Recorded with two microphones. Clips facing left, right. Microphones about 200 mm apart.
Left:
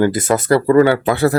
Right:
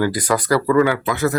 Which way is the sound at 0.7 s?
35° left (ahead or behind).